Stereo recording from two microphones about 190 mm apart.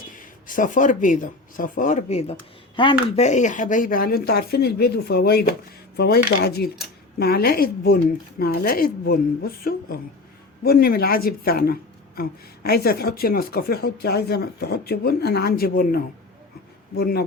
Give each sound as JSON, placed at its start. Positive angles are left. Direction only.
{"t": 0.1, "sound": "a woman's voice", "side_deg": 45}